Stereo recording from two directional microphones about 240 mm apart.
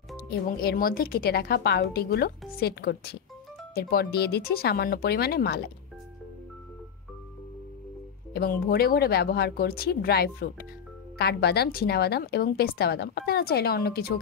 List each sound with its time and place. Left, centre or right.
0.3 s a woman's voice: left
8.3 s a woman's voice: left